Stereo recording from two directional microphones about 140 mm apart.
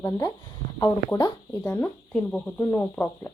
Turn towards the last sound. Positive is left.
turn(degrees=10)  # may be behind; listen again after turning